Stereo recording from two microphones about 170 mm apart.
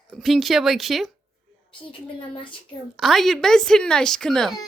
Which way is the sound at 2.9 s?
Centre (ahead or behind).